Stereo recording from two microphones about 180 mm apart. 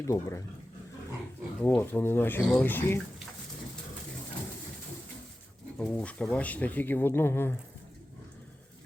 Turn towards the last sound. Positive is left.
turn(degrees=10)  # may be behind; listen again after turning